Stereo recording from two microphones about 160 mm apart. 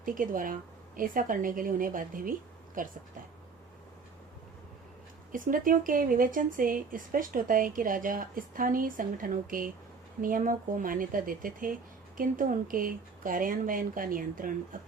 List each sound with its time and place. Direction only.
0.0 s speech: 60° right (ahead or behind)
5.3 s speech: 60° right (ahead or behind)